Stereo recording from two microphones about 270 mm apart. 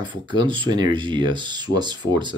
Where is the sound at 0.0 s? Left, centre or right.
Centre.